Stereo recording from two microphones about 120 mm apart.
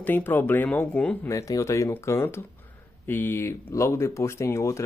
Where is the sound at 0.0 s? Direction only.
15° left (ahead or behind).